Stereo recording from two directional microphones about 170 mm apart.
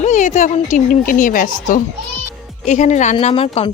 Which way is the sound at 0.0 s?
45° left (ahead or behind).